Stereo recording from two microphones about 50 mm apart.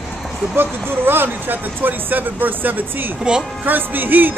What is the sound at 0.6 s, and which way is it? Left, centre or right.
Speech, right.